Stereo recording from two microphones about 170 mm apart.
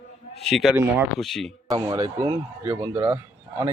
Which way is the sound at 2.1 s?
15° right (ahead or behind).